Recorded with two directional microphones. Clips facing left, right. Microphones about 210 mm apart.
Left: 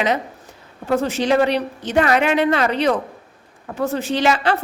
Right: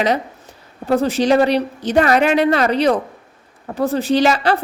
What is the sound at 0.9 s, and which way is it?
A woman's voice, 35° right (ahead or behind).